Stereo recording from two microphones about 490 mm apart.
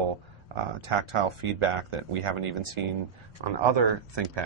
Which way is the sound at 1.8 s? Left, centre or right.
Right.